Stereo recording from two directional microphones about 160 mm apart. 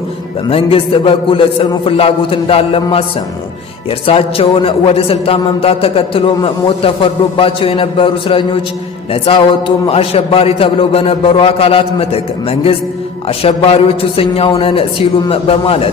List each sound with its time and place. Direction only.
0.5 s a man's voice: 35° left (ahead or behind)
4.0 s a man's voice: 35° left (ahead or behind)